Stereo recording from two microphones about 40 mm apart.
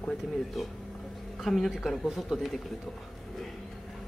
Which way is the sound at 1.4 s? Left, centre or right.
Centre.